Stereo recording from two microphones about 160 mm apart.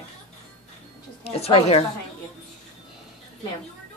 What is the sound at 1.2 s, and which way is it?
Speech, 40° left (ahead or behind).